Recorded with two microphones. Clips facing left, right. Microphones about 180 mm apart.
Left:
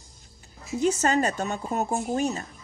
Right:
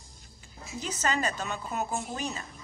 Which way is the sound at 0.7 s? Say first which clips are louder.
Left 8 dB; 45° left (ahead or behind).